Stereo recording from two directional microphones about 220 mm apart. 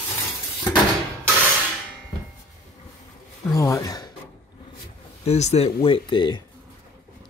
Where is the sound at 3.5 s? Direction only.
15° left (ahead or behind).